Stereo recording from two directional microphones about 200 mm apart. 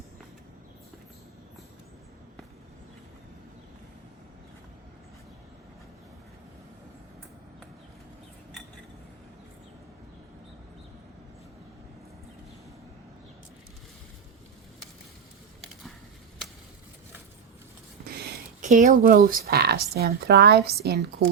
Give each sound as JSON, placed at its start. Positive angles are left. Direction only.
{"t": 18.6, "sound": "speech", "side_deg": -40}